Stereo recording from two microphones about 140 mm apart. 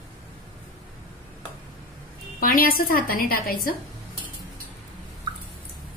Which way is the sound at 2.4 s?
90° left.